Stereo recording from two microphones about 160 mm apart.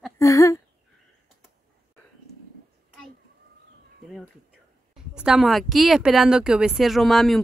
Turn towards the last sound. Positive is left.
turn(degrees=0)  # may be behind; listen again after turning